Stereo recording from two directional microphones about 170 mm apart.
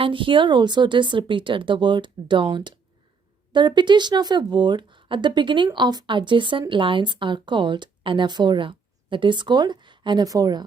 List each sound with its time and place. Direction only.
0.0 s speech: 30° right (ahead or behind)